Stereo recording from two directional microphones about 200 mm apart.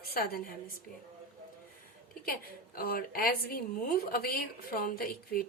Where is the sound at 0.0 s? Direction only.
45° left (ahead or behind).